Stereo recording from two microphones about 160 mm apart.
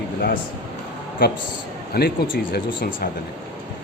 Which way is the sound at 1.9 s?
75° left (ahead or behind).